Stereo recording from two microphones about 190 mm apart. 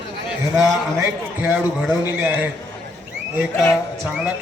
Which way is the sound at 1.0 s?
10° right (ahead or behind).